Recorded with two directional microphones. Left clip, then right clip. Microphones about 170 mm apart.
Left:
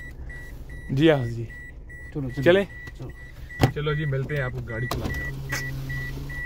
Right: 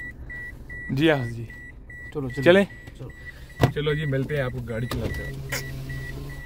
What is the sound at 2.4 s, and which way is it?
Speech, 15° right (ahead or behind).